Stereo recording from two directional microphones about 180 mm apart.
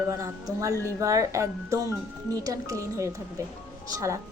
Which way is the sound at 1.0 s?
20° right (ahead or behind).